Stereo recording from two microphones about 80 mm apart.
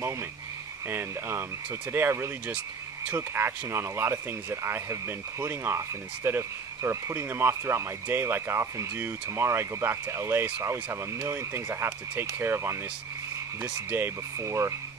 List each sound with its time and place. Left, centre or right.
0.8 s speech: right